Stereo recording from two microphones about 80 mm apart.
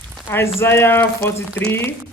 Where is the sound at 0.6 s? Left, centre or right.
Left.